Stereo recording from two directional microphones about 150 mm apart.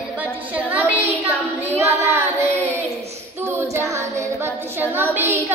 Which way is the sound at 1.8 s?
20° right (ahead or behind).